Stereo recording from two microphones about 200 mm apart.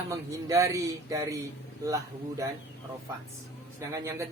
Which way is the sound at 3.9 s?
15° right (ahead or behind).